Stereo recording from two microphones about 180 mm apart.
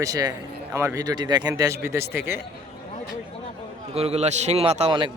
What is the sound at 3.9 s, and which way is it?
A man's voice, 35° right (ahead or behind).